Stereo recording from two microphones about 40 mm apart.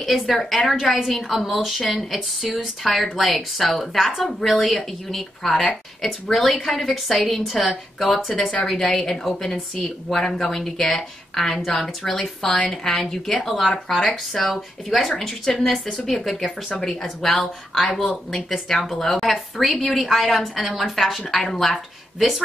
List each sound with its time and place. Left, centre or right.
0.0 s a woman's voice: centre
12.5 s a woman's voice: left
13.0 s speech: centre
13.4 s a woman's voice: centre